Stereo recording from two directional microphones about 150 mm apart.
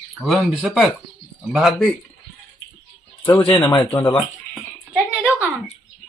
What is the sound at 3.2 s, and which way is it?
Speech, 35° left (ahead or behind).